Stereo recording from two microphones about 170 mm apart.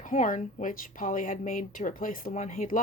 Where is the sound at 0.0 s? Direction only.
50° left (ahead or behind).